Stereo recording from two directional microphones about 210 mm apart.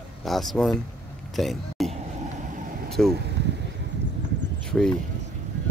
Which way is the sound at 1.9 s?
35° right (ahead or behind).